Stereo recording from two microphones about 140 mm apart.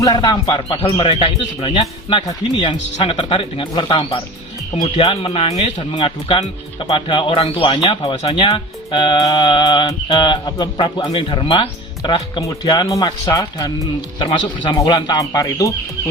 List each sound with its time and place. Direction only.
0.0 s speech: 30° left (ahead or behind)
5.2 s speech: 45° left (ahead or behind)
5.9 s speech: 35° left (ahead or behind)
12.4 s speech: 30° left (ahead or behind)